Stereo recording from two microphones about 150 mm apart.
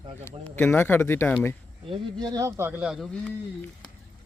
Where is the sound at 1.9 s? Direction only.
30° right (ahead or behind); by 3.3 s centre (ahead or behind).